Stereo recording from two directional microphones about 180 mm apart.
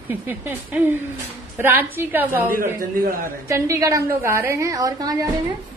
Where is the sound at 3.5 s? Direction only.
15° right (ahead or behind).